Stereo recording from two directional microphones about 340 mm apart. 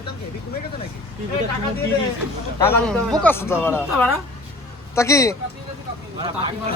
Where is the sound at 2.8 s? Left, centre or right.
Centre.